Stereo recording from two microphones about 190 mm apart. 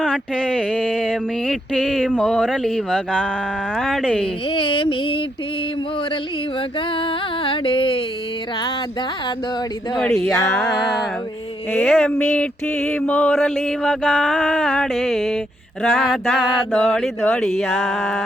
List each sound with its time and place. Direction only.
0.0 s mantra: 5° left (ahead or behind)
4.4 s mantra: 25° left (ahead or behind)
6.7 s music: 25° left (ahead or behind)
10.0 s mantra: centre (ahead or behind)
16.7 s speech: 5° left (ahead or behind)
17.4 s mantra: centre (ahead or behind)